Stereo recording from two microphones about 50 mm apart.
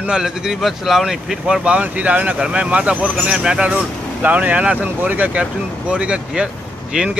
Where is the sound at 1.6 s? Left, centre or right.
Right.